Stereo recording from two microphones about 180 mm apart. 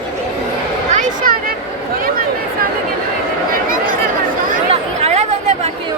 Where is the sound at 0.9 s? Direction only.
50° right (ahead or behind).